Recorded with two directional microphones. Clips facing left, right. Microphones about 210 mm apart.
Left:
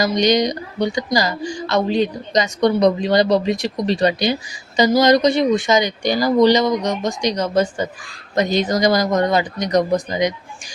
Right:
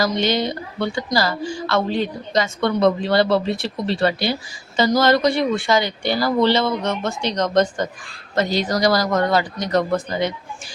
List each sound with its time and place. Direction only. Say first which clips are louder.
0.0 s a woman's voice: left 4 dB; 15° left (ahead or behind)
8.4 s speech: left 2 dB; 20° left (ahead or behind)